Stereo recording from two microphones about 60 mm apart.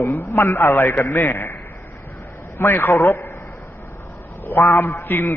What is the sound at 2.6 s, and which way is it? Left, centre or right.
Speech, left.